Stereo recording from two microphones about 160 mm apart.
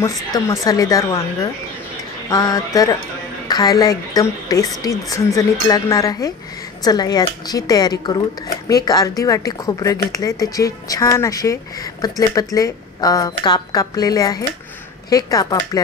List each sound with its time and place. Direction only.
0.3 s speech: 20° left (ahead or behind)